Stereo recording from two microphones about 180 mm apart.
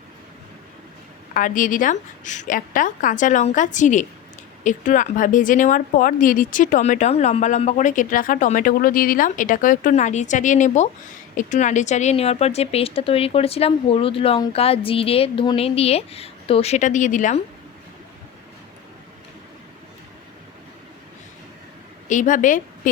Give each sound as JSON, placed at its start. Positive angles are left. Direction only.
{"t": 1.3, "sound": "speech", "side_deg": 50}
{"t": 22.1, "sound": "a woman's voice", "side_deg": 45}